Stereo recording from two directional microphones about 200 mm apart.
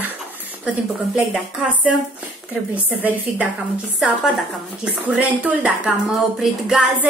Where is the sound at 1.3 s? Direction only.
5° right (ahead or behind).